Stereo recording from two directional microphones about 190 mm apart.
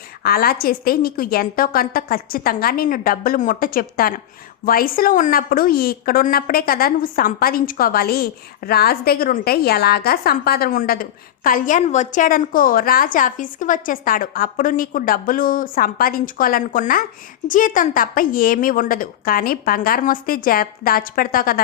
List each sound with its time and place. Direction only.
0.2 s a woman's voice: 50° left (ahead or behind)